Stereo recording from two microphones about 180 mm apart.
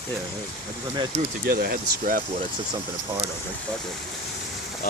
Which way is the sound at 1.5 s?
55° right (ahead or behind).